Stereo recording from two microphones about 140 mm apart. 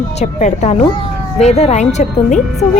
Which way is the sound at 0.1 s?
55° left (ahead or behind).